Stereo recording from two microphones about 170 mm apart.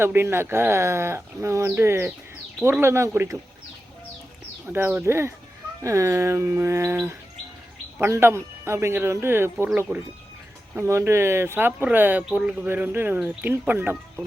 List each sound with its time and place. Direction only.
0.0 s speech: 15° right (ahead or behind)
4.7 s speech: 10° right (ahead or behind)